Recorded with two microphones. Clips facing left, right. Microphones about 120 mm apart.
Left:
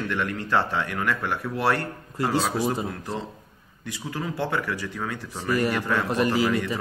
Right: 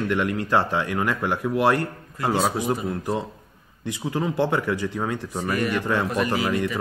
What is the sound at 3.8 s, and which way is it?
Speech, 25° right (ahead or behind).